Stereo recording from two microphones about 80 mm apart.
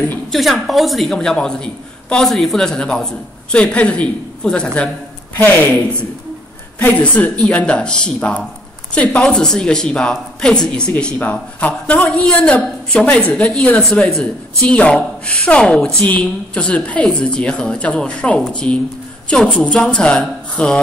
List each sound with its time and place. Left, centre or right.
0.3 s a woman's voice: centre
5.4 s a woman's voice: left